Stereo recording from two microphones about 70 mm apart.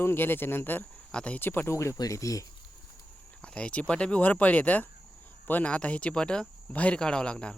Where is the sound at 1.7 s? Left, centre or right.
Left.